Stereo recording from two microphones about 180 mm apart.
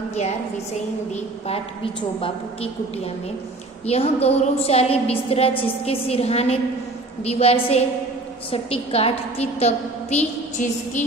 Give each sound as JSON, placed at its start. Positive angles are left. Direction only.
{"t": 2.1, "sound": "a woman's voice", "side_deg": 30}
{"t": 3.8, "sound": "a woman's voice", "side_deg": 35}